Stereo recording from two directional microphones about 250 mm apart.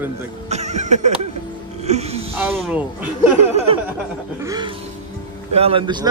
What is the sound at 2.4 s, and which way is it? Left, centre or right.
Speech, centre.